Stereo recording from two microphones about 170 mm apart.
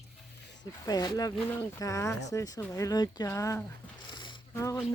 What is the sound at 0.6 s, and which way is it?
Speech, 25° left (ahead or behind).